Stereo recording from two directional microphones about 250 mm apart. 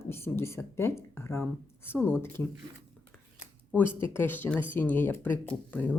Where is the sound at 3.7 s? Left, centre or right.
Centre.